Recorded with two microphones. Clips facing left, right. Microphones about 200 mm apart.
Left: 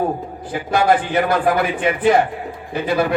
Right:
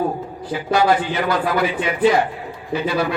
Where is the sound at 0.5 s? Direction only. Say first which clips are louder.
Left 1 dB; 50° left (ahead or behind).